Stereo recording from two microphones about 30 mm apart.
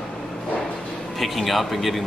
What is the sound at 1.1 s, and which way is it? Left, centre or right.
Speech, centre.